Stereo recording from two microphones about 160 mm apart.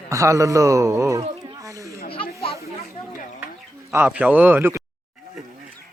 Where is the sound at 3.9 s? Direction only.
10° right (ahead or behind).